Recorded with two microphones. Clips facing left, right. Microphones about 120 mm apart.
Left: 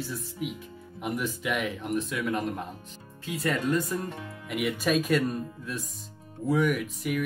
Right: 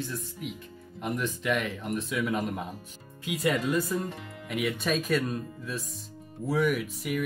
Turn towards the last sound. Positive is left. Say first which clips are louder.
# left 1 dB
turn(degrees=0)  # may be behind; listen again after turning